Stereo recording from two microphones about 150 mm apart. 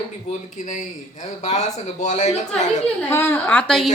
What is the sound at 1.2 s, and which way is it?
Speech, 50° left (ahead or behind).